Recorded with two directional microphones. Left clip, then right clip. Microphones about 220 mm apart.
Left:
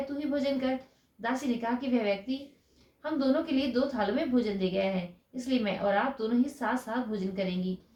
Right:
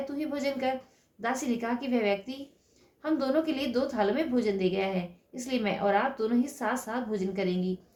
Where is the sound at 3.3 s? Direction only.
40° right (ahead or behind).